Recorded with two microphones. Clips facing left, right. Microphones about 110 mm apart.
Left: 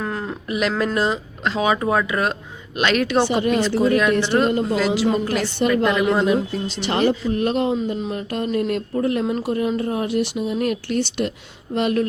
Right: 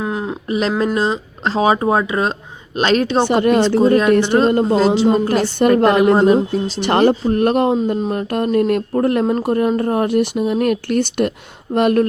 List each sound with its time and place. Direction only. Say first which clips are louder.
0.0 s a sound: right 4 dB; 15° right (ahead or behind)
0.4 s speech: right 3 dB; 30° right (ahead or behind)
1.5 s speech: right 5 dB; 35° right (ahead or behind)
3.2 s speech: right 5 dB; 55° right (ahead or behind)
3.8 s speech: right 5 dB; 35° right (ahead or behind)
4.1 s speech: right 6 dB; 50° right (ahead or behind)
4.6 s speech: right 6 dB; 35° right (ahead or behind); by 12.0 s 50° right (ahead or behind)